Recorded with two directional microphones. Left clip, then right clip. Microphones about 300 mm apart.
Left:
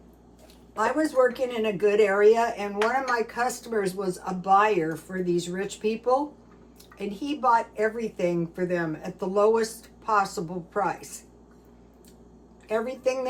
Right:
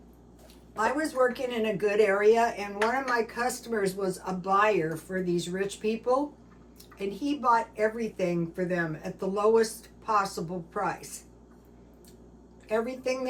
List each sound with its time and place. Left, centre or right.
0.8 s speech: centre
12.6 s speech: centre